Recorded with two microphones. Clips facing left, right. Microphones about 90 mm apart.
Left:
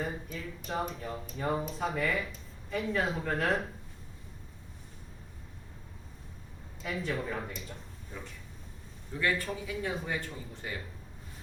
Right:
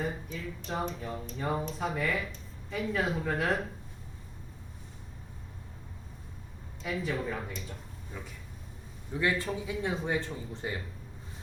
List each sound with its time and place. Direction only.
0.0 s speech: centre (ahead or behind)
6.8 s speech: centre (ahead or behind)
9.1 s speech: 25° right (ahead or behind)